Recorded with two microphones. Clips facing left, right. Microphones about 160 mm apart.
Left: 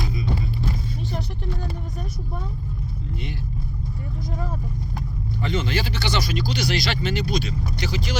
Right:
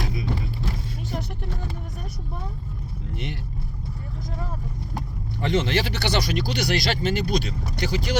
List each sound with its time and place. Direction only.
5.4 s speech: 60° right (ahead or behind)